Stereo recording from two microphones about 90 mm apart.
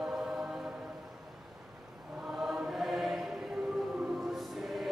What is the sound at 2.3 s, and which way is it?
Chant, 5° right (ahead or behind).